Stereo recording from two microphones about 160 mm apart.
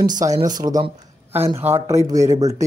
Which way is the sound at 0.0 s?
25° right (ahead or behind).